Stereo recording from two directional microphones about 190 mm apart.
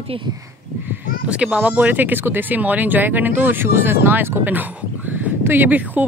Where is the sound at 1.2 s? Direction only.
5° right (ahead or behind).